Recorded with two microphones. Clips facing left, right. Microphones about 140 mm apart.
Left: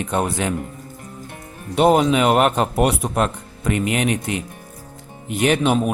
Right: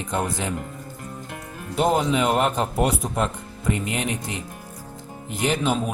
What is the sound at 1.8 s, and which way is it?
Speech, 75° left (ahead or behind).